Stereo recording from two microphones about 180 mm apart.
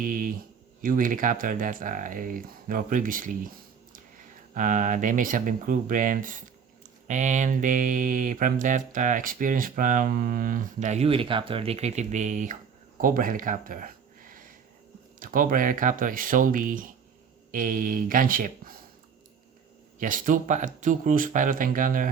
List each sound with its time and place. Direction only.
0.0 s mantra: 50° right (ahead or behind)
4.5 s mantra: 45° right (ahead or behind)
13.0 s a sound: 50° right (ahead or behind)
15.2 s mantra: 50° right (ahead or behind)
20.0 s mantra: 50° right (ahead or behind)